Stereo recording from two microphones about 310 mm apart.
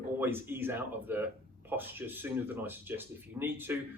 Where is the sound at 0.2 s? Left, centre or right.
Centre.